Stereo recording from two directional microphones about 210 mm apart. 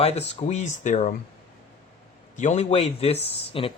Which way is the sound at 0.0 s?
30° left (ahead or behind).